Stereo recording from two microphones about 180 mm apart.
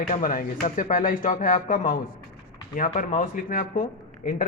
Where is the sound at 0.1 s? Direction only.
50° left (ahead or behind).